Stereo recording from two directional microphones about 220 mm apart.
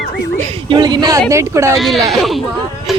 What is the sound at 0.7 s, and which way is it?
Speech, 20° right (ahead or behind).